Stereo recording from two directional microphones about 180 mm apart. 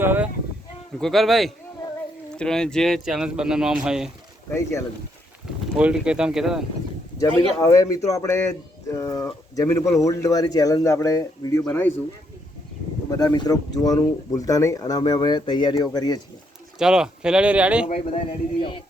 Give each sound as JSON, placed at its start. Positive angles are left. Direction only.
{"t": 0.0, "sound": "a sound", "side_deg": -10}
{"t": 0.9, "sound": "speech", "side_deg": 0}
{"t": 5.7, "sound": "speech", "side_deg": -5}
{"t": 7.2, "sound": "speech", "side_deg": 20}
{"t": 13.1, "sound": "speech", "side_deg": 20}
{"t": 16.7, "sound": "speech", "side_deg": -5}
{"t": 17.8, "sound": "speech", "side_deg": 40}